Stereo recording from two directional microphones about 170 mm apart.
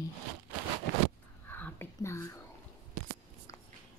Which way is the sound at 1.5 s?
10° left (ahead or behind).